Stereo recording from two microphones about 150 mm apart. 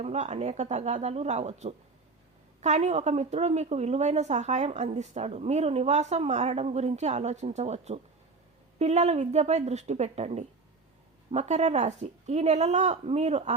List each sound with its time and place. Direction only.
0.0 s a woman's voice: 45° right (ahead or behind)